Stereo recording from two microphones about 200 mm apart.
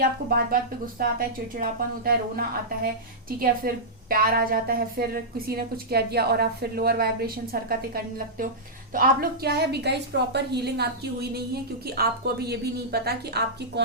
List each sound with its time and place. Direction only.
0.3 s a woman's voice: 45° right (ahead or behind)